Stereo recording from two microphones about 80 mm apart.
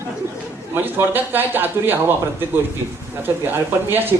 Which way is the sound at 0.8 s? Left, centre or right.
Right.